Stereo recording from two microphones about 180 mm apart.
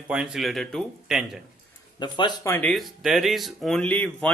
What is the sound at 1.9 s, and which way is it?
Speech, 25° left (ahead or behind).